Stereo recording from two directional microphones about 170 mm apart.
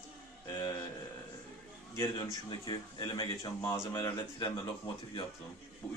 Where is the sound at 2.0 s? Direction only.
25° left (ahead or behind).